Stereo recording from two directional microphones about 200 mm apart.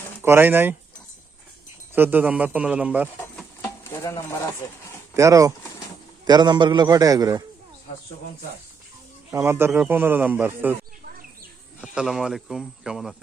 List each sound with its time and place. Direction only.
0.2 s speech: 10° right (ahead or behind)
1.9 s speech: 10° right (ahead or behind)
3.6 s stir: 15° left (ahead or behind)
5.1 s a man's voice: 15° right (ahead or behind)
9.3 s speech: 15° right (ahead or behind)
11.8 s speech: 5° right (ahead or behind)